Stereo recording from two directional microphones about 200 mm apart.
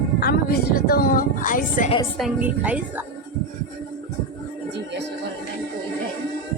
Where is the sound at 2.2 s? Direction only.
5° right (ahead or behind).